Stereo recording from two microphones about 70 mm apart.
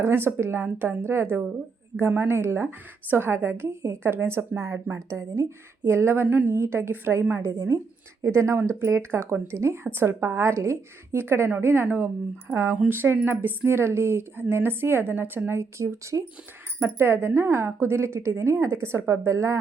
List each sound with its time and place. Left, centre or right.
0.3 s speech: right
6.3 s a woman's voice: right
6.6 s speech: right
8.2 s a woman's voice: right
15.4 s speech: right